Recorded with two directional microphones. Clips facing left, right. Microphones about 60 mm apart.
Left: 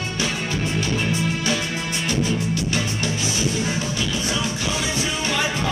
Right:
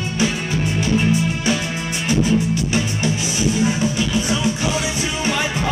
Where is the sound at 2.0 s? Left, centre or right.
Right.